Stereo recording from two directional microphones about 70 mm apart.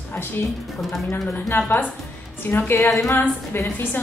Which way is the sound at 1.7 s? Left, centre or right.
Left.